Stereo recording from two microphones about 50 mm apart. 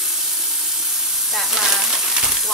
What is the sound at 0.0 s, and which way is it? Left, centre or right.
Sizzle, centre.